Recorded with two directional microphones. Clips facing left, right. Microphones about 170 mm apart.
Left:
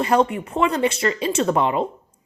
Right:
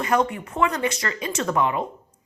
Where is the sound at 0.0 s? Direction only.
30° left (ahead or behind).